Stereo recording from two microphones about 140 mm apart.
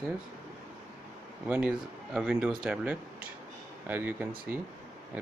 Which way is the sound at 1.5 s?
10° right (ahead or behind).